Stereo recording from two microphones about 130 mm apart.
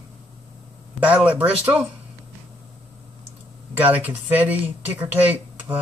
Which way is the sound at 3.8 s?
15° right (ahead or behind).